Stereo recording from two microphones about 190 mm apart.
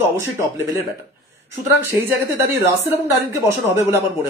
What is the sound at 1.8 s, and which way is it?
Speech, 15° right (ahead or behind).